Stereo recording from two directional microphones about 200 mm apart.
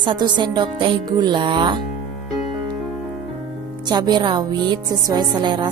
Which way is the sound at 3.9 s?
20° right (ahead or behind).